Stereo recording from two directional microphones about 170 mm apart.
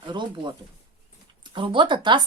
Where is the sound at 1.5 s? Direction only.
30° right (ahead or behind).